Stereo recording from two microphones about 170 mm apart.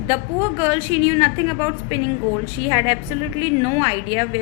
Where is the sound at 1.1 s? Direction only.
25° right (ahead or behind).